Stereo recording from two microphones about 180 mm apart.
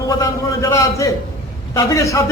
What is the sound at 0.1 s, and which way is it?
A man's voice, 20° left (ahead or behind).